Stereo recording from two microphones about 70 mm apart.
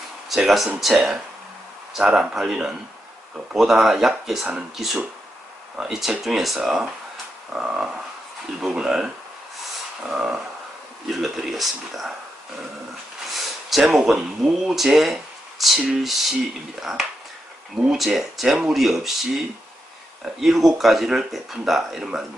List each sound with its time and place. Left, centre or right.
0.3 s speech: centre
5.7 s speech: centre
13.3 s a sound: centre
13.8 s speech: centre